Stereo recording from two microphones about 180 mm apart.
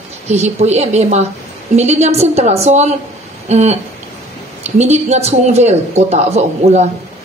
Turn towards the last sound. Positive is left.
turn(degrees=-40)  # may be behind; listen again after turning